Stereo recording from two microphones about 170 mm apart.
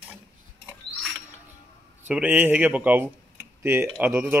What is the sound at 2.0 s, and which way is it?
Speech, 10° right (ahead or behind).